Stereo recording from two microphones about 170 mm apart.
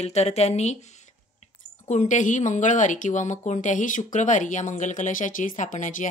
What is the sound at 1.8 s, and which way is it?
Speech, 45° left (ahead or behind).